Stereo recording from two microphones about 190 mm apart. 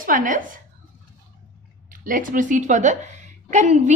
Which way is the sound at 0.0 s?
45° right (ahead or behind).